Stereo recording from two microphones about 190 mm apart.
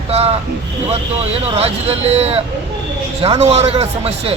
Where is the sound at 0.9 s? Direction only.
30° right (ahead or behind).